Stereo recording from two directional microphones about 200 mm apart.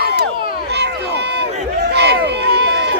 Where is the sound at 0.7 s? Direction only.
55° right (ahead or behind).